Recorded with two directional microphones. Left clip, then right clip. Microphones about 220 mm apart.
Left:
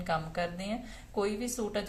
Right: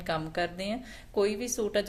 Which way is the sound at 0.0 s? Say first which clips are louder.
Right 1 dB; 45° right (ahead or behind).